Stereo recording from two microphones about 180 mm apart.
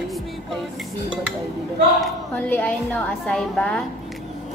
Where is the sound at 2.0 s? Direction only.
10° left (ahead or behind).